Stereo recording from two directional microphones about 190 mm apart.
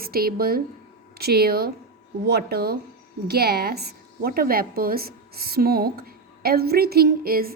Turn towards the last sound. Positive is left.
turn(degrees=-50)  # may be behind; listen again after turning